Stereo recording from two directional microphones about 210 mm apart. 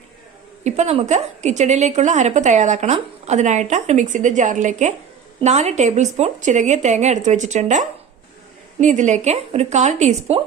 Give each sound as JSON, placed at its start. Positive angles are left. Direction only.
{"t": 0.6, "sound": "a woman's voice", "side_deg": -35}